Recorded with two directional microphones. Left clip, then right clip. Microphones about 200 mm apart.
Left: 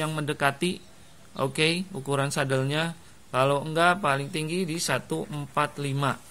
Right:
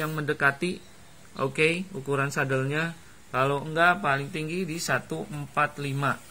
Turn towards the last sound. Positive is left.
turn(degrees=45)  # may be behind; listen again after turning